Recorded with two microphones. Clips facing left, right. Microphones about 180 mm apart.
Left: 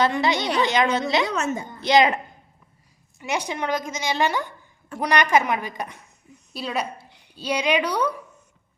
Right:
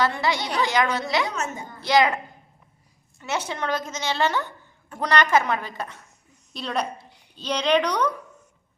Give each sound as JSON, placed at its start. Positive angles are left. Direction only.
{"t": 0.0, "sound": "a woman's voice", "side_deg": 20}
{"t": 1.3, "sound": "a woman's voice", "side_deg": 80}
{"t": 1.8, "sound": "a woman's voice", "side_deg": 20}
{"t": 3.2, "sound": "a woman's voice", "side_deg": 15}